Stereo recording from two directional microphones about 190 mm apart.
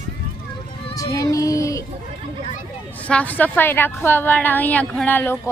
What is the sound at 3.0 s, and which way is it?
A woman's voice, 5° left (ahead or behind).